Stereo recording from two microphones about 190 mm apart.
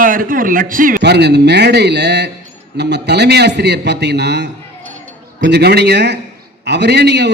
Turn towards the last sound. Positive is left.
turn(degrees=-65)  # may be behind; listen again after turning